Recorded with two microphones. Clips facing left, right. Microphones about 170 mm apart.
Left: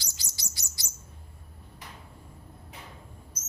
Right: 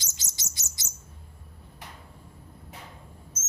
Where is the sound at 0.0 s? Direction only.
20° right (ahead or behind).